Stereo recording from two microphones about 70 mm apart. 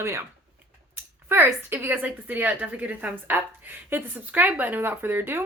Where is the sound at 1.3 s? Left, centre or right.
Right.